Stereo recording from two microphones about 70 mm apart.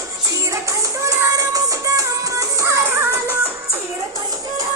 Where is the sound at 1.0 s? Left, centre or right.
Right.